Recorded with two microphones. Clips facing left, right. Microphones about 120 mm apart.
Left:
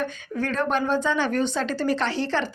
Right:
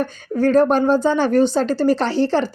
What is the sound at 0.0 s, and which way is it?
Speech, 40° right (ahead or behind).